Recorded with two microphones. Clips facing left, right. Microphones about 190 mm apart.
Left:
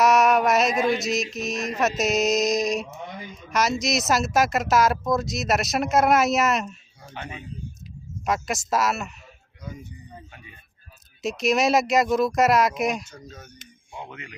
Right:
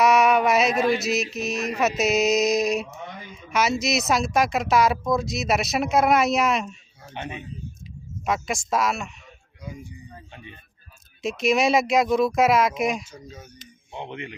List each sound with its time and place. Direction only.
0.0 s mantra: centre (ahead or behind)
3.3 s speech: centre (ahead or behind)
7.1 s speech: 20° right (ahead or behind)
8.2 s speech: centre (ahead or behind)
11.2 s speech: centre (ahead or behind)
13.9 s speech: 25° right (ahead or behind)